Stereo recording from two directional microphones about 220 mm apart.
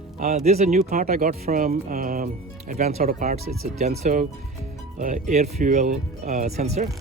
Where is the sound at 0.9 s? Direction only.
40° right (ahead or behind).